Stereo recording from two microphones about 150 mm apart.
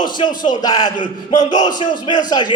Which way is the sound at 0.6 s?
25° left (ahead or behind).